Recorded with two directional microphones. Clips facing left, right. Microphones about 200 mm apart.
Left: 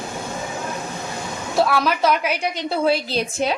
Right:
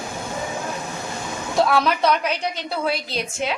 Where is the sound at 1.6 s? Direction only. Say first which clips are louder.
Even; centre (ahead or behind).